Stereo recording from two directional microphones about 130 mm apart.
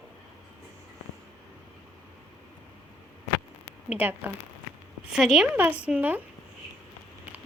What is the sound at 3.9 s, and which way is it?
Speech, 15° right (ahead or behind).